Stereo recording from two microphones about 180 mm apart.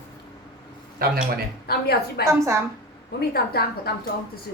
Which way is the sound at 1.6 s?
60° left (ahead or behind).